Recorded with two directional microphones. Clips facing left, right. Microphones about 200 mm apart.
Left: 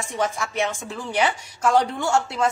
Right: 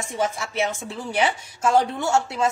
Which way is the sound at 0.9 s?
25° right (ahead or behind).